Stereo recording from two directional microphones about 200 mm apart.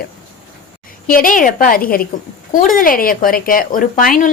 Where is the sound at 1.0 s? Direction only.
45° left (ahead or behind).